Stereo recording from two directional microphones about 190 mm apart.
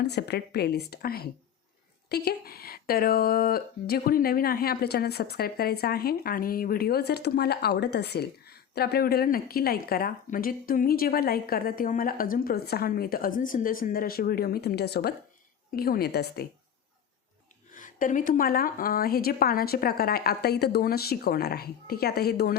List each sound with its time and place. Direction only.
0.0 s a woman's voice: 60° left (ahead or behind)
17.7 s speech: 45° left (ahead or behind)